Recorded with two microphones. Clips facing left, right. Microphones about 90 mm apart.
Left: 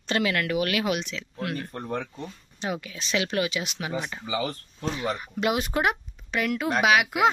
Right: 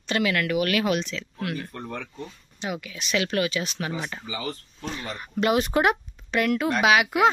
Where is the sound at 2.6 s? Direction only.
30° left (ahead or behind).